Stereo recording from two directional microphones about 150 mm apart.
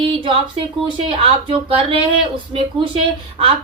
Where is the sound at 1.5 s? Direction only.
35° right (ahead or behind).